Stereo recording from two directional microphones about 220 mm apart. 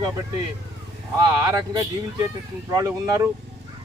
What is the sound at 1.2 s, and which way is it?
Speech, 15° right (ahead or behind).